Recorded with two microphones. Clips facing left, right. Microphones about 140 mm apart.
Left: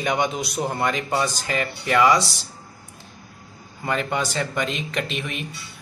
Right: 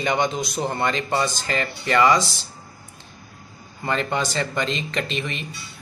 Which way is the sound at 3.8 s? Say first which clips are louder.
Right 1 dB; 5° left (ahead or behind).